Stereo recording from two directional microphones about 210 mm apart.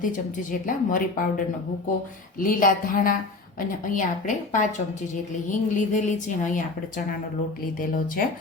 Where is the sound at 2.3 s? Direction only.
40° left (ahead or behind).